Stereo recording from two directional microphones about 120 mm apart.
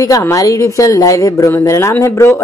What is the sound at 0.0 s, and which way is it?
Speech, 30° left (ahead or behind).